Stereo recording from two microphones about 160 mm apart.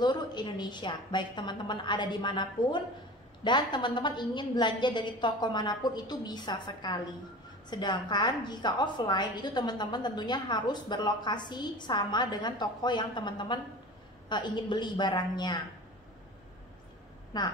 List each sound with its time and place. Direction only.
0.0 s a woman's voice: 25° left (ahead or behind)
17.3 s a woman's voice: 25° left (ahead or behind)